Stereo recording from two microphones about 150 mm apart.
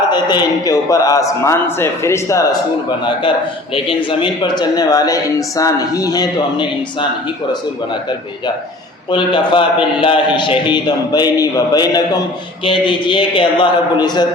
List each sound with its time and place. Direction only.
0.1 s speech: 30° left (ahead or behind)
3.8 s speech: 30° left (ahead or behind)
9.0 s a man's voice: 30° left (ahead or behind)